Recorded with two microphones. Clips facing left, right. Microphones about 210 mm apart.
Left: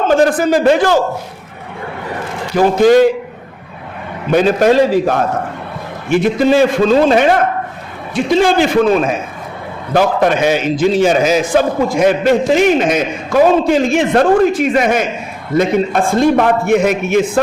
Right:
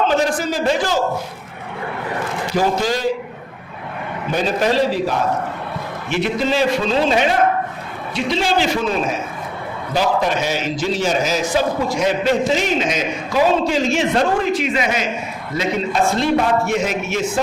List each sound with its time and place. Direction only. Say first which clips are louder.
0.1 s a man's voice: left 8 dB; 55° left (ahead or behind)
2.8 s a man's voice: left 13 dB; 55° left (ahead or behind)
4.3 s a man's voice: left 8 dB; 55° left (ahead or behind)